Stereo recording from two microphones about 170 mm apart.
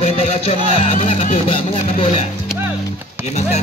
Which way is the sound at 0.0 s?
35° left (ahead or behind).